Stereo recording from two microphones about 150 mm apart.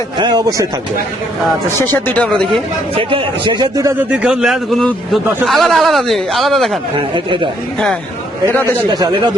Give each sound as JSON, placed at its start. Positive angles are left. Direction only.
{"t": 0.2, "sound": "speech", "side_deg": -30}
{"t": 1.9, "sound": "speech", "side_deg": 10}
{"t": 2.9, "sound": "a man's voice", "side_deg": -35}
{"t": 3.9, "sound": "a man's voice", "side_deg": -10}
{"t": 8.4, "sound": "speech", "side_deg": 15}
{"t": 8.9, "sound": "a man's voice", "side_deg": -30}